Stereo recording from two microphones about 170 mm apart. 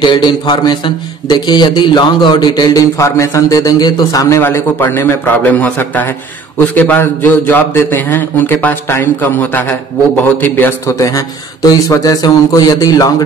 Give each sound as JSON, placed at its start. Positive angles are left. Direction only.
{"t": 0.0, "sound": "a man's voice", "side_deg": 25}